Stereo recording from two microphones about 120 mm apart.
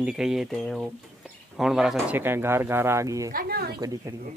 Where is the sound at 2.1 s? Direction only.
20° right (ahead or behind).